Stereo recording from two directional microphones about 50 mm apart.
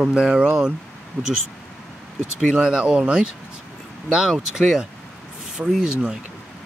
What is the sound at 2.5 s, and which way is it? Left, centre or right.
Speech, centre.